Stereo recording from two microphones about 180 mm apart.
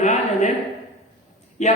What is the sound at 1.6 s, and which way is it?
Speech, 40° left (ahead or behind).